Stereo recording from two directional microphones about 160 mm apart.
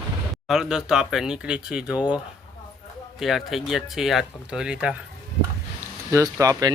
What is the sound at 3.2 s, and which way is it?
Speech, centre (ahead or behind).